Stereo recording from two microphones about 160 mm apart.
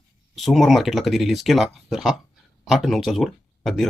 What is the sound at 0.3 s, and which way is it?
Speech, centre (ahead or behind).